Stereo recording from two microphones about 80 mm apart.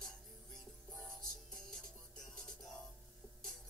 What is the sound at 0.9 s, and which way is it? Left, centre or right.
Music, centre.